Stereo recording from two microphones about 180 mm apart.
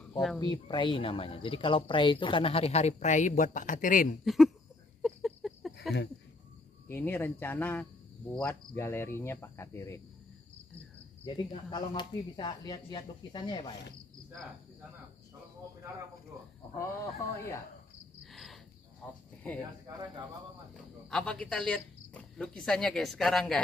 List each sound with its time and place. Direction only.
0.4 s speech: 25° left (ahead or behind); by 4.2 s 50° left (ahead or behind)
4.2 s speech: centre (ahead or behind)
5.0 s a sound: centre (ahead or behind)
6.9 s speech: 10° left (ahead or behind)
11.2 s speech: 25° left (ahead or behind)
16.7 s speech: 15° left (ahead or behind)
18.2 s cricket: centre (ahead or behind)
19.0 s speech: centre (ahead or behind)
20.7 s speech: 5° left (ahead or behind)